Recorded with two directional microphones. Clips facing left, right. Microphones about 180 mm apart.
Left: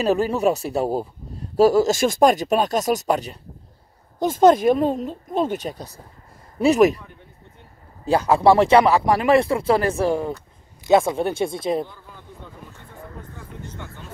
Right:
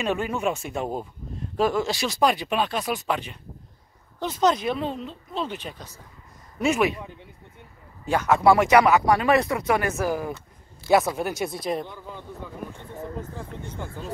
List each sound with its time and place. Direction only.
0.0 s speech: 35° left (ahead or behind)
8.0 s speech: 35° left (ahead or behind)